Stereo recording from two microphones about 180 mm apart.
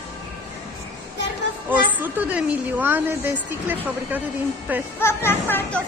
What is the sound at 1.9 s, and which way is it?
A woman's voice, 10° right (ahead or behind).